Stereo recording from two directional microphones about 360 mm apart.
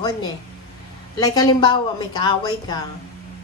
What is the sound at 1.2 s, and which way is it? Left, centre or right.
A woman's voice, centre.